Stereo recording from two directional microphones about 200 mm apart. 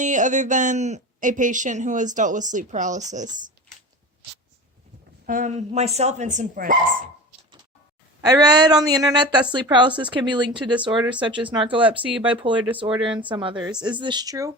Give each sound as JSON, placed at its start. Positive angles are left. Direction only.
{"t": 0.0, "sound": "speech", "side_deg": -40}
{"t": 5.2, "sound": "speech", "side_deg": -40}
{"t": 8.2, "sound": "speech", "side_deg": -20}
{"t": 11.0, "sound": "speech", "side_deg": -5}
{"t": 11.5, "sound": "speech", "side_deg": -25}